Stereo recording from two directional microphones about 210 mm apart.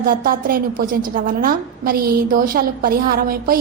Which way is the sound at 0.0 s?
45° right (ahead or behind).